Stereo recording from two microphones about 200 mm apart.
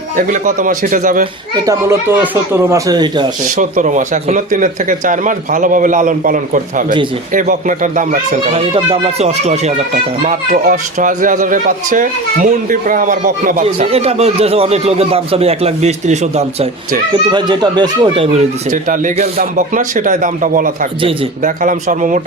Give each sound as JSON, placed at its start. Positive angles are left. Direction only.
{"t": 0.2, "sound": "speech", "side_deg": -40}
{"t": 1.6, "sound": "speech", "side_deg": -10}
{"t": 3.5, "sound": "speech", "side_deg": -40}
{"t": 8.4, "sound": "speech", "side_deg": -30}
{"t": 18.7, "sound": "speech", "side_deg": -40}